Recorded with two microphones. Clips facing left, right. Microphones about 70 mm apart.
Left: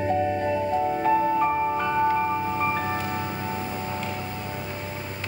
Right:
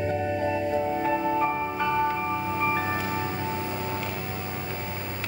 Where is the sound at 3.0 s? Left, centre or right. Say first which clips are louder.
Even; centre.